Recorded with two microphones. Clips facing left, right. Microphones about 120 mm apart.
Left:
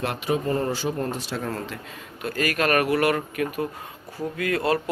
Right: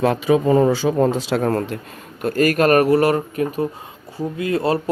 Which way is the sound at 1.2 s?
90° right.